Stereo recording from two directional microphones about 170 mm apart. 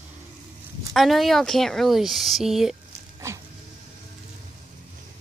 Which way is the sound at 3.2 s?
15° right (ahead or behind).